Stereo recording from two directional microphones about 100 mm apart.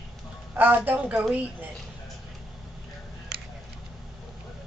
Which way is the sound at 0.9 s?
15° right (ahead or behind).